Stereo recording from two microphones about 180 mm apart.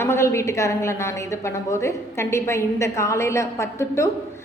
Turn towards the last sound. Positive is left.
turn(degrees=15)  # may be behind; listen again after turning